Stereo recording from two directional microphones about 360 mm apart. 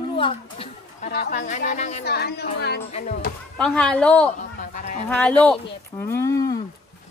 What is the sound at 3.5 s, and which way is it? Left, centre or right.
A woman's voice, centre.